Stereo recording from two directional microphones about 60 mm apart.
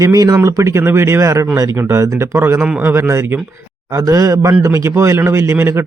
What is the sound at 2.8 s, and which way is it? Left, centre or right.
Speech, right.